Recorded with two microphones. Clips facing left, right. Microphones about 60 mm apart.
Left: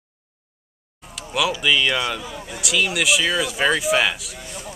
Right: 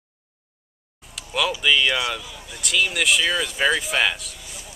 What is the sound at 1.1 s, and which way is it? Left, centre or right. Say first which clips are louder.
Speech: left 2 dB; centre.